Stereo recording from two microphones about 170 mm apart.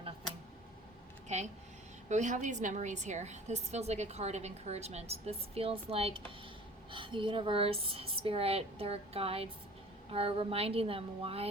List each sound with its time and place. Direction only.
1.3 s a woman's voice: 40° right (ahead or behind)